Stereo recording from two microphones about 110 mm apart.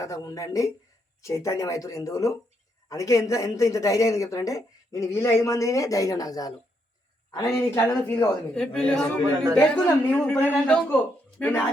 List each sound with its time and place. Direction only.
0.0 s speech: 30° left (ahead or behind); by 11.6 s 15° left (ahead or behind)